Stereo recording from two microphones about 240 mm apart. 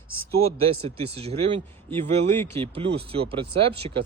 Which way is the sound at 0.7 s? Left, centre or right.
Right.